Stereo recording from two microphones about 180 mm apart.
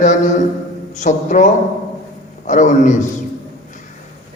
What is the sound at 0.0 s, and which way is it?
A man's voice, 40° left (ahead or behind).